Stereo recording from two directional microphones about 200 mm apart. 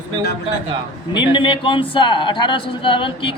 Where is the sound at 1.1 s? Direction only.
25° left (ahead or behind).